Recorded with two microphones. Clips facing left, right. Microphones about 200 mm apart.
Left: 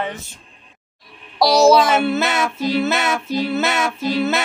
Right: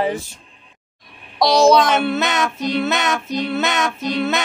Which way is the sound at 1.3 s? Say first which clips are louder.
Even; 5° left (ahead or behind).